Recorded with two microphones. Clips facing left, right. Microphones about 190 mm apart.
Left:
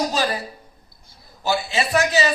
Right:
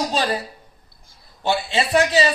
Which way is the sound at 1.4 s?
30° right (ahead or behind).